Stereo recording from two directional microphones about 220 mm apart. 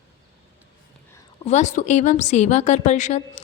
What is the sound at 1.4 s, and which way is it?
A woman's voice, 30° left (ahead or behind).